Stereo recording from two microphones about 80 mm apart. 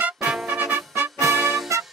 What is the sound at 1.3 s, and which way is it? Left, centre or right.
Music, centre.